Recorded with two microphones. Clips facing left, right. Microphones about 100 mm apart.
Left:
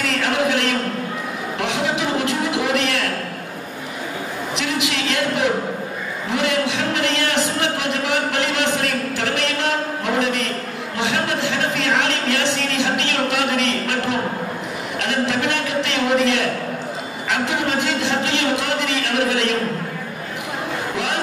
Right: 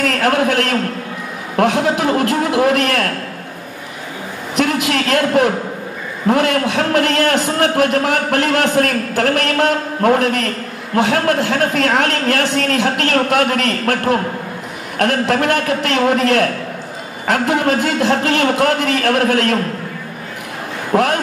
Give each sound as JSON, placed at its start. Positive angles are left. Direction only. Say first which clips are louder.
{"t": 0.0, "sound": "a man's voice", "louder": "right 5 dB", "side_deg": -45}
{"t": 4.6, "sound": "a sound", "louder": "right 8 dB", "side_deg": -45}
{"t": 6.2, "sound": "a man's voice", "louder": "right 6 dB", "side_deg": -45}
{"t": 20.9, "sound": "a man's voice", "louder": "right 13 dB", "side_deg": -45}